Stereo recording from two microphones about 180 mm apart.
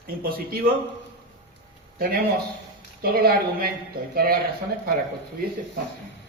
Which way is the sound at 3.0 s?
55° right (ahead or behind).